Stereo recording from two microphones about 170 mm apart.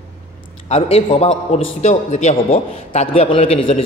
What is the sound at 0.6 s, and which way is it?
A man's voice, 35° left (ahead or behind).